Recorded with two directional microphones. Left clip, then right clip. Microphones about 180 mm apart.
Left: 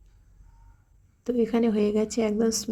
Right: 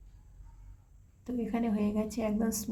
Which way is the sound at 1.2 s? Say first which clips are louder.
Left 10 dB; 25° left (ahead or behind).